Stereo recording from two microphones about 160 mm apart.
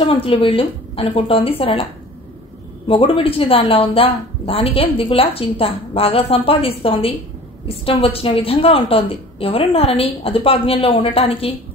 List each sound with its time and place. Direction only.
0.0 s a woman's voice: 35° left (ahead or behind)
2.9 s a woman's voice: 35° left (ahead or behind)